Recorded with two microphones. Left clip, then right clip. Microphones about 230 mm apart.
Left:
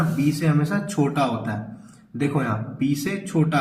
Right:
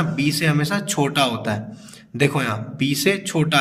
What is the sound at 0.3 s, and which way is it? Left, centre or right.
A man's voice, right.